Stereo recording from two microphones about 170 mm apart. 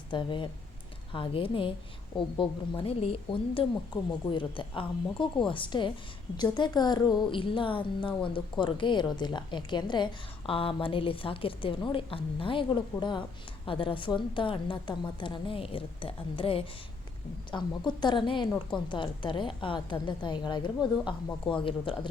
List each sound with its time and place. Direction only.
0.1 s a woman's voice: 30° left (ahead or behind)